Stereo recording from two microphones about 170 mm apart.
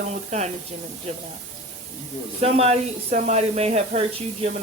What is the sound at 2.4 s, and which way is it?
Speech, 35° right (ahead or behind).